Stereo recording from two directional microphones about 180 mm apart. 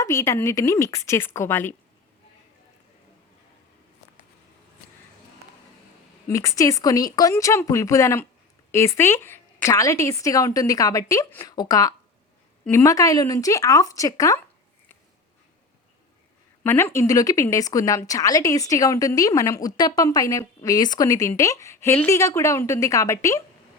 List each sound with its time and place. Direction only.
0.0 s a woman's voice: 15° left (ahead or behind)
6.2 s a woman's voice: 15° left (ahead or behind)
16.6 s speech: 15° left (ahead or behind)